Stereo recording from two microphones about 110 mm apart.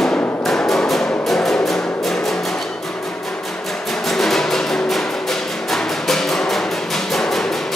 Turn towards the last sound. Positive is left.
turn(degrees=5)  # may be behind; listen again after turning